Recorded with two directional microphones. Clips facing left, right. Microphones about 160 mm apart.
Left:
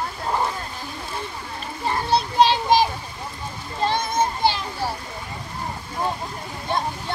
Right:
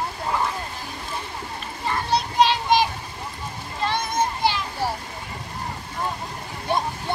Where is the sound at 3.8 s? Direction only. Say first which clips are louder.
Left 2 dB; 30° left (ahead or behind).